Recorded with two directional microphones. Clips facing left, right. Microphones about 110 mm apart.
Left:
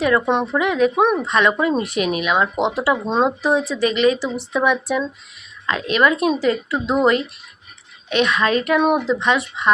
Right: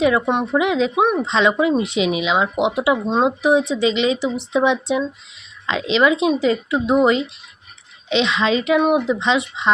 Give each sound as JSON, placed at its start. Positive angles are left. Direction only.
{"t": 0.0, "sound": "a woman's voice", "side_deg": -10}
{"t": 0.9, "sound": "speech", "side_deg": -5}
{"t": 1.2, "sound": "a woman's voice", "side_deg": -20}
{"t": 8.6, "sound": "speech", "side_deg": -10}